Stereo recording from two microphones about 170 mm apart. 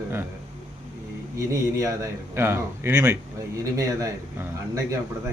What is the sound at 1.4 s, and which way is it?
A man's voice, 20° right (ahead or behind).